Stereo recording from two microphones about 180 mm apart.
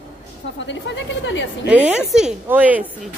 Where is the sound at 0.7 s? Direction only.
90° left.